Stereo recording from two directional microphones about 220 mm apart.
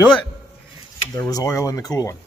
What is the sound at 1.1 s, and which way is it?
Speech, 15° left (ahead or behind).